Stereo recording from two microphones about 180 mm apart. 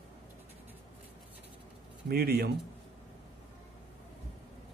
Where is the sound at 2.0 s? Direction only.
60° right (ahead or behind).